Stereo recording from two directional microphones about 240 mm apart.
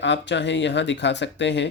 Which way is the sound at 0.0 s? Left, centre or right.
Left.